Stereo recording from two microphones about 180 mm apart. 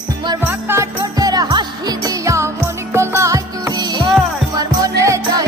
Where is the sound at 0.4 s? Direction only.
15° right (ahead or behind).